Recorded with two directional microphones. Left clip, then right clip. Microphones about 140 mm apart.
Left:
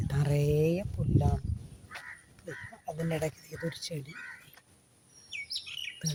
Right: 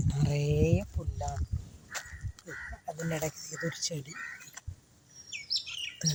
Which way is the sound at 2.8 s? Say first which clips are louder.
Left 2 dB; 25° left (ahead or behind).